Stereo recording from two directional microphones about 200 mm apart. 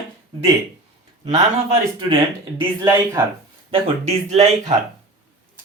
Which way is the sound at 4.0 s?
35° right (ahead or behind).